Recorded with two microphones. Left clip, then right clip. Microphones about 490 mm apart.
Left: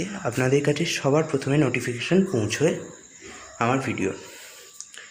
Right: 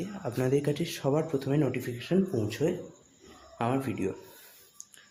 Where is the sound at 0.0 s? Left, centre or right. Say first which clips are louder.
Left 7 dB; right.